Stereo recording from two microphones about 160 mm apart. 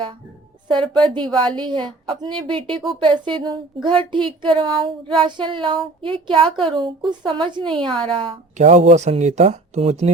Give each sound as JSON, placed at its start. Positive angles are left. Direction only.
{"t": 1.0, "sound": "speech", "side_deg": -30}
{"t": 8.5, "sound": "speech", "side_deg": -45}